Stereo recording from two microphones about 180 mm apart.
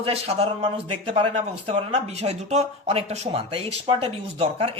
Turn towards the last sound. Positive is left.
turn(degrees=-30)  # may be behind; listen again after turning